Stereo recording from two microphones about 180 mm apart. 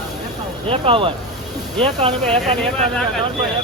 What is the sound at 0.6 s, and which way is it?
Speech, 30° right (ahead or behind).